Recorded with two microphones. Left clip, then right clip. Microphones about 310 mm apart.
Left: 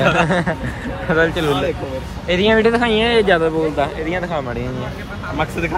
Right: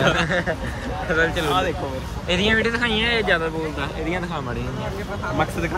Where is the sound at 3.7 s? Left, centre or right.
Centre.